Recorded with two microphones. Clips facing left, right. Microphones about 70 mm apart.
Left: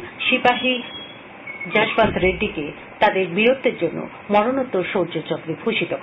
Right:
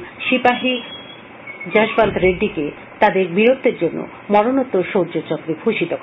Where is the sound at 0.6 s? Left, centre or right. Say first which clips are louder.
Right 2 dB; right.